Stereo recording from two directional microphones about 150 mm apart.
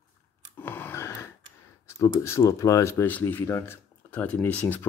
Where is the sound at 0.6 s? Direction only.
15° left (ahead or behind).